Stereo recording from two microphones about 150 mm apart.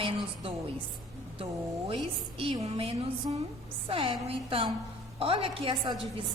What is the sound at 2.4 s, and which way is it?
A woman's voice, 40° right (ahead or behind).